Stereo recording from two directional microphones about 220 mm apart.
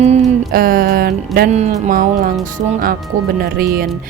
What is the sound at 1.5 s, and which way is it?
Speech, 30° right (ahead or behind).